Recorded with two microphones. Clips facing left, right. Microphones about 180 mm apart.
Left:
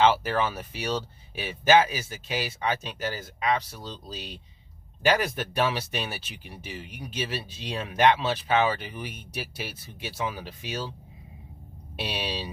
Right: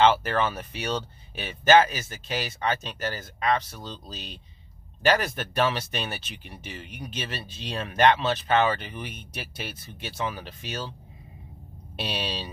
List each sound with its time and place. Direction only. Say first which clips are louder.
0.0 s speech: right 1 dB; 5° left (ahead or behind)
12.0 s speech: even; 10° left (ahead or behind)